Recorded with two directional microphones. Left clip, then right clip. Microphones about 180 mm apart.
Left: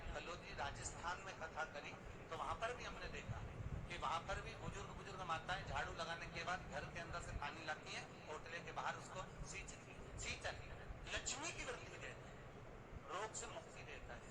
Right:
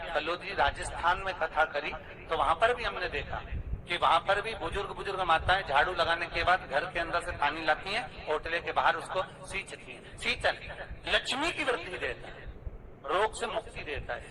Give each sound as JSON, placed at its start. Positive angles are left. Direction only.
{"t": 0.0, "sound": "a man's voice", "side_deg": -45}